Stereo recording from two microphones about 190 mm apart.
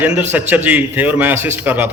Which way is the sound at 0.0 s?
10° right (ahead or behind).